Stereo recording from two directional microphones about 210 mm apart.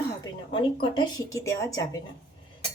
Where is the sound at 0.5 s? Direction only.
25° left (ahead or behind).